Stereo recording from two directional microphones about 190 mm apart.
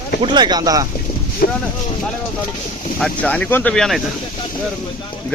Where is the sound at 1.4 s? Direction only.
50° left (ahead or behind).